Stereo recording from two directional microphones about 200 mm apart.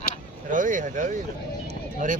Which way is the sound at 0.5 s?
40° right (ahead or behind).